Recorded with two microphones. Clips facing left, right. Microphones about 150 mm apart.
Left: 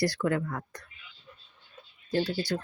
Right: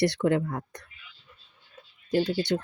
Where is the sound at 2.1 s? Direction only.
20° right (ahead or behind).